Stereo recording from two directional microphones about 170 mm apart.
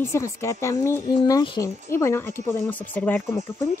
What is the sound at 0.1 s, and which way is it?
Speech, 15° left (ahead or behind).